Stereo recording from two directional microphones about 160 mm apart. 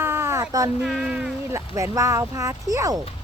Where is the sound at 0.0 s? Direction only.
15° right (ahead or behind).